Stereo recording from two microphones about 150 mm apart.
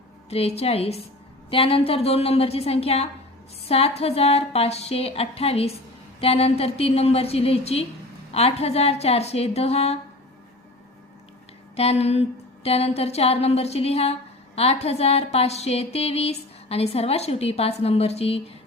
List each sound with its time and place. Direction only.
0.3 s a woman's voice: 45° left (ahead or behind)
11.8 s a woman's voice: 45° left (ahead or behind)